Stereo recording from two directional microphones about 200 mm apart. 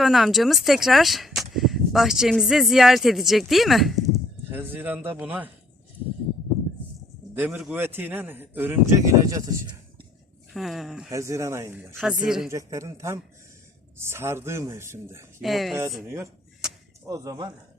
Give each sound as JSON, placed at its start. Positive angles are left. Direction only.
{"t": 0.0, "sound": "a man's voice", "side_deg": 0}
{"t": 7.3, "sound": "a man's voice", "side_deg": -10}
{"t": 10.5, "sound": "speech", "side_deg": 0}
{"t": 11.1, "sound": "a man's voice", "side_deg": -15}
{"t": 11.9, "sound": "speech", "side_deg": -5}
{"t": 12.5, "sound": "a man's voice", "side_deg": -15}
{"t": 15.4, "sound": "speech", "side_deg": 0}
{"t": 16.0, "sound": "a sound", "side_deg": -15}
{"t": 17.1, "sound": "speech", "side_deg": -20}